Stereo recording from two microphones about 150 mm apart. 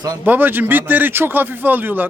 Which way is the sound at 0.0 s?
15° right (ahead or behind).